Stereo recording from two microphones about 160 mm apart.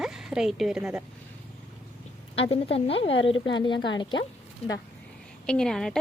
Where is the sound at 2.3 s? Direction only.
35° left (ahead or behind).